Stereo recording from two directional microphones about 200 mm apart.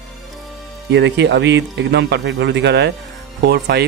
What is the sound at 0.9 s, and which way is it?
Speech, 60° right (ahead or behind).